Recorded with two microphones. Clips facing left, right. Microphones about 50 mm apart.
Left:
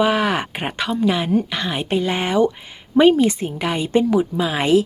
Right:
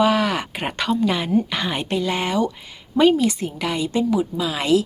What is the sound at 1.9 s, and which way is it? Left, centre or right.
Speech, left.